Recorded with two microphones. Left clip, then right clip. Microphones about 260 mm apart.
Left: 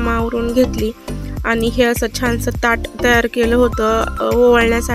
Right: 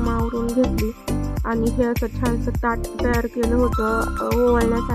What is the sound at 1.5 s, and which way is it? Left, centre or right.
Speech, left.